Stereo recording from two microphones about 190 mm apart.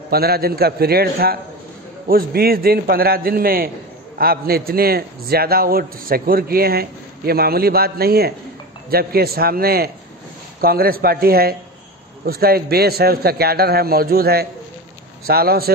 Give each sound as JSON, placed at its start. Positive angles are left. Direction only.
{"t": 0.1, "sound": "a man's voice", "side_deg": -55}